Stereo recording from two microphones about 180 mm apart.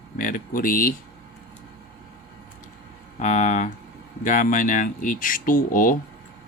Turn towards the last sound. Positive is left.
turn(degrees=50)  # may be behind; listen again after turning